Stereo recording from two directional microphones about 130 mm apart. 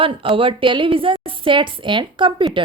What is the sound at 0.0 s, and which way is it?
A woman's voice, 45° right (ahead or behind).